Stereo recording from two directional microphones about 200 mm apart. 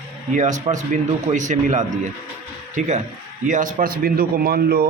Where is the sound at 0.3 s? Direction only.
35° right (ahead or behind).